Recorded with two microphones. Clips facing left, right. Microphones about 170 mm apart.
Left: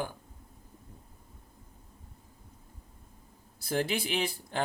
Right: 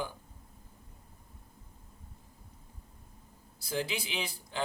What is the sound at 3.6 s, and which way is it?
Speech, 50° left (ahead or behind).